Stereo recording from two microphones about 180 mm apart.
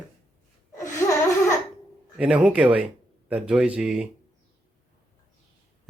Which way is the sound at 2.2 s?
5° right (ahead or behind).